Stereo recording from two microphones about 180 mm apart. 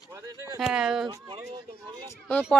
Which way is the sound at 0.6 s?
5° right (ahead or behind).